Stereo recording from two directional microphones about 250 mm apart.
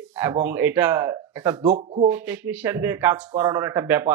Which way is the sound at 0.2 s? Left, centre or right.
Centre.